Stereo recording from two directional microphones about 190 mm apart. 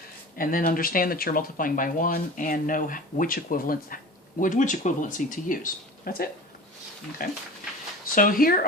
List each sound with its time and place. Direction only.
0.3 s speech: 50° left (ahead or behind)